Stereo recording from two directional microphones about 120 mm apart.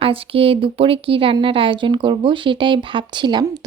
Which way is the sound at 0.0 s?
50° right (ahead or behind).